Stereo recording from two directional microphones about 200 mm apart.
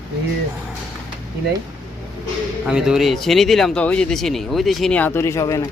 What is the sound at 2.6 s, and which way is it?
Speech, 5° right (ahead or behind).